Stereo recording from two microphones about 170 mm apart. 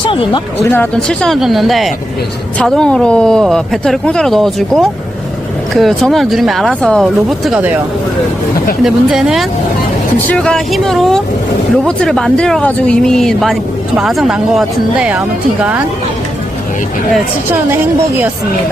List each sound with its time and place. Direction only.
0.0 s speech: 30° left (ahead or behind)
0.6 s speech: 10° left (ahead or behind); by 7.8 s 5° right (ahead or behind)
8.8 s speech: centre (ahead or behind)